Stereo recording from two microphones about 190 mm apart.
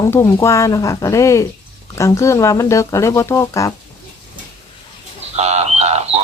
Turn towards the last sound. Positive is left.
turn(degrees=-35)  # may be behind; listen again after turning